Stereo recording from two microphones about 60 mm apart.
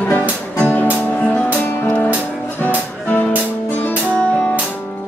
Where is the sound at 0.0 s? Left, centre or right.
Left.